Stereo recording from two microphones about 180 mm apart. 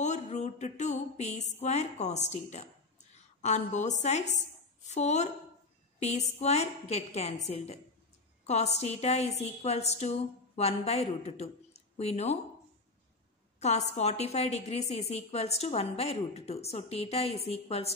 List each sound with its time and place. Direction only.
0.0 s a woman's voice: 40° left (ahead or behind)
13.6 s a woman's voice: 40° left (ahead or behind)